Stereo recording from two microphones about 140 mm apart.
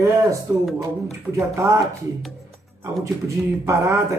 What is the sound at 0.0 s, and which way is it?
Speech, 20° right (ahead or behind).